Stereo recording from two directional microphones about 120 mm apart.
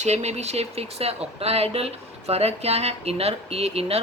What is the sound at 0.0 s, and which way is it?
A woman's voice, 65° right (ahead or behind).